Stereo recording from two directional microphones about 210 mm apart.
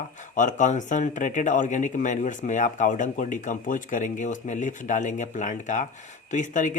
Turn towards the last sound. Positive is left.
turn(degrees=35)  # may be behind; listen again after turning